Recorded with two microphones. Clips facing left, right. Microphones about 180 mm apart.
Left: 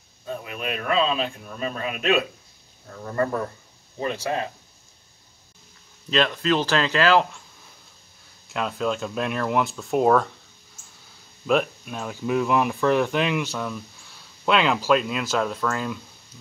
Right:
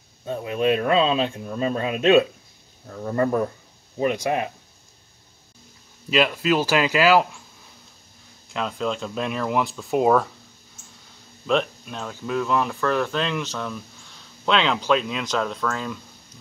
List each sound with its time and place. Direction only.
0.3 s speech: 30° right (ahead or behind)
6.0 s speech: 10° right (ahead or behind)
8.5 s speech: 5° left (ahead or behind)
11.4 s speech: 5° left (ahead or behind)